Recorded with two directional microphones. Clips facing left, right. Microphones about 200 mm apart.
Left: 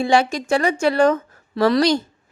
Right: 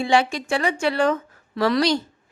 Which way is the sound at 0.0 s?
40° left (ahead or behind).